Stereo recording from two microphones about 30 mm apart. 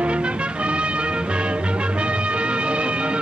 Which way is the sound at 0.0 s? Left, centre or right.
Right.